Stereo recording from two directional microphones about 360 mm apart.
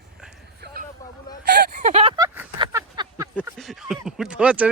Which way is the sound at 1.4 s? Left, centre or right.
Right.